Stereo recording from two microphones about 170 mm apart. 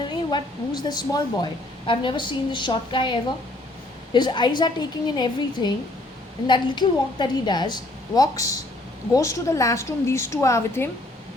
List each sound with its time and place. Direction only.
0.1 s a woman's voice: 25° left (ahead or behind)